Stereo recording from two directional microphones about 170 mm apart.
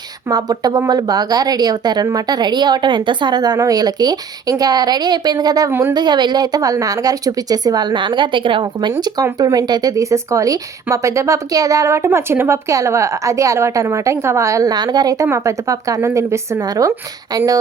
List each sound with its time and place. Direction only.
0.3 s speech: 20° right (ahead or behind)